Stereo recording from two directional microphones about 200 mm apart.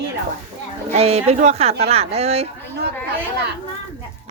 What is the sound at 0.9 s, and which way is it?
Speech, 30° right (ahead or behind).